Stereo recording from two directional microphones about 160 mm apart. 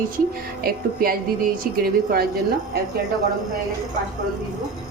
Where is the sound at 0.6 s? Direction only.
70° right (ahead or behind).